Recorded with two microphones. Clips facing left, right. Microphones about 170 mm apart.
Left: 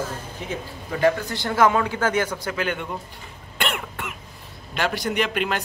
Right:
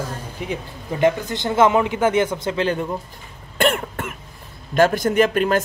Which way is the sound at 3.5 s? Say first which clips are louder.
Right 8 dB; 45° right (ahead or behind).